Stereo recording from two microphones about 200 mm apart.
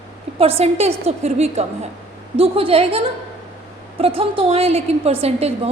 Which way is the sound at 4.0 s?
30° right (ahead or behind).